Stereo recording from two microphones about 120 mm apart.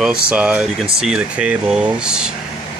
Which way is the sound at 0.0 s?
10° right (ahead or behind).